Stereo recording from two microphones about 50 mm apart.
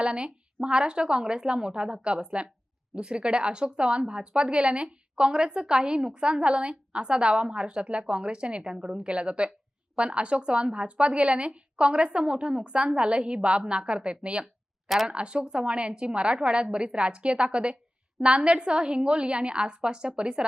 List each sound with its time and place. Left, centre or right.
0.0 s a woman's voice: centre
14.8 s a woman's voice: centre
15.1 s speech: right